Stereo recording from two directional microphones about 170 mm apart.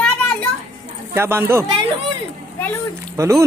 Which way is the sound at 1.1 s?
15° right (ahead or behind).